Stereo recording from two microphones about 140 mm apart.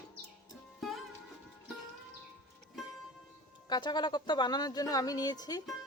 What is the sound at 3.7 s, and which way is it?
Speech, 30° left (ahead or behind).